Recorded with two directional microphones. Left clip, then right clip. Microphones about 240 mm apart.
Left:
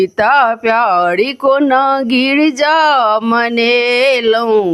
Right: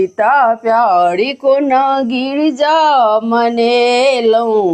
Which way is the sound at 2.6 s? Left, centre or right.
Left.